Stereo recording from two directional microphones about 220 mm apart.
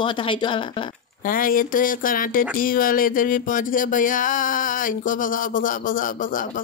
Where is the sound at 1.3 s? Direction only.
40° left (ahead or behind).